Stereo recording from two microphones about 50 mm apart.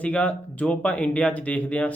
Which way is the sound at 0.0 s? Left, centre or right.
Left.